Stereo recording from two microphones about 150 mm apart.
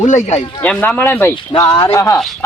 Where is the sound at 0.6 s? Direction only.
10° left (ahead or behind).